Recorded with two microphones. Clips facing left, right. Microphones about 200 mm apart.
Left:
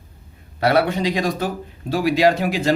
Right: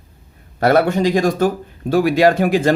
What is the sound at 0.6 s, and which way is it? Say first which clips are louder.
Speech: right 4 dB; 45° right (ahead or behind).